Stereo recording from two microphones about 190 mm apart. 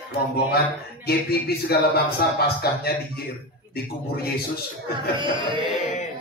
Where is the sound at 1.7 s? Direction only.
55° left (ahead or behind).